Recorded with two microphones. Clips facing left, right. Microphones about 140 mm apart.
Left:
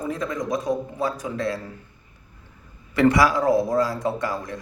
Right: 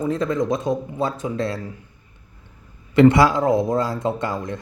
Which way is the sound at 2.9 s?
25° right (ahead or behind).